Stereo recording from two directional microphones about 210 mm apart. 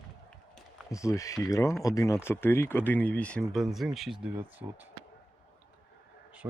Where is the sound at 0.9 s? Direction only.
15° left (ahead or behind); by 4.2 s centre (ahead or behind).